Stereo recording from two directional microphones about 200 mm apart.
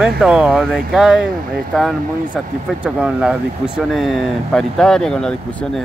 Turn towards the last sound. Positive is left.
turn(degrees=5)  # may be behind; listen again after turning